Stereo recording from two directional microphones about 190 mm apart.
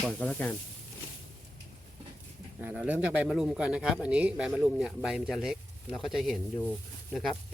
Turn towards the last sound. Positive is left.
turn(degrees=0)  # may be behind; listen again after turning